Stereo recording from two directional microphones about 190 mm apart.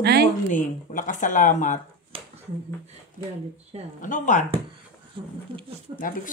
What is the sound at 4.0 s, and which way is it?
Speech, 40° left (ahead or behind).